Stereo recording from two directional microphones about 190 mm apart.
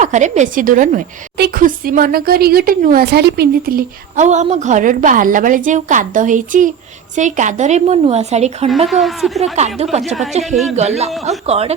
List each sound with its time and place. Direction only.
0.0 s a woman's voice: 40° right (ahead or behind)
8.9 s a woman's voice: centre (ahead or behind)
9.6 s speech: 35° right (ahead or behind)
10.4 s a woman's voice: centre (ahead or behind)
10.8 s speech: 35° right (ahead or behind)